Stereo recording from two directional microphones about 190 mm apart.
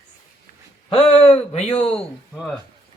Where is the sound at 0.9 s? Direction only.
30° left (ahead or behind).